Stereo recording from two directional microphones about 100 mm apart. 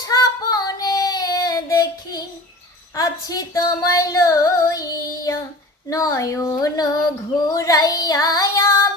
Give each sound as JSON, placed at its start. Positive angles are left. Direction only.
{"t": 0.0, "sound": "child singing", "side_deg": 35}
{"t": 2.9, "sound": "female singing", "side_deg": 35}